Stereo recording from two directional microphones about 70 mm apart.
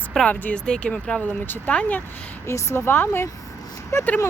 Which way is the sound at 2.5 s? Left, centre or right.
Left.